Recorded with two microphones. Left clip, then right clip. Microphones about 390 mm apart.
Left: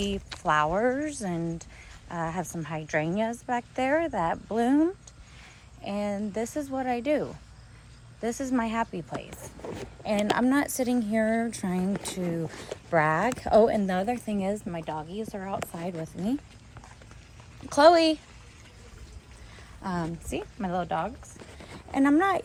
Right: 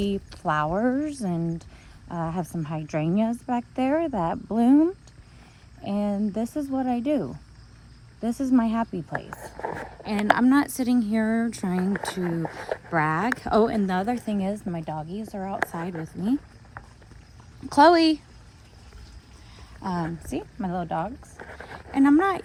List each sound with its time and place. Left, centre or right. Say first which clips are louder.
0.4 s speech: even; centre
8.2 s speech: right 4 dB; centre
8.9 s speech: right 3 dB; right
10.0 s speech: right 3 dB; centre
15.9 s speech: right 3 dB; centre
17.7 s speech: right 2 dB; centre
19.8 s speech: right 3 dB; centre